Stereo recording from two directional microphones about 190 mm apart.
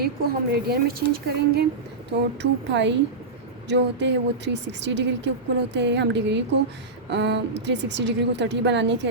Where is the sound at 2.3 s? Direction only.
70° right (ahead or behind).